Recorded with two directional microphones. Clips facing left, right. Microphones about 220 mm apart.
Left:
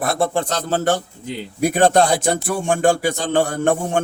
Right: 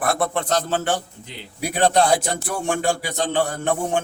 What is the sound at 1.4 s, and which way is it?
A man's voice, 50° left (ahead or behind).